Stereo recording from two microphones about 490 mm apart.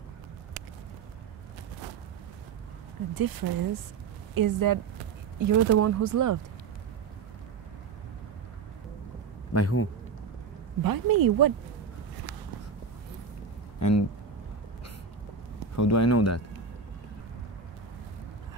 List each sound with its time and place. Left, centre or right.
3.2 s speech: right
9.5 s a man's voice: left
10.8 s speech: right
13.7 s a sound: left
15.7 s speech: left